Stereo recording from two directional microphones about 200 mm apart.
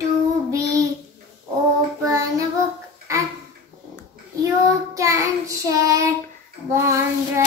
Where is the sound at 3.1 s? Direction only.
15° right (ahead or behind).